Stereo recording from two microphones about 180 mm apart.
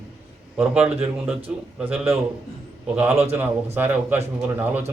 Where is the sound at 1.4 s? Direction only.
10° right (ahead or behind).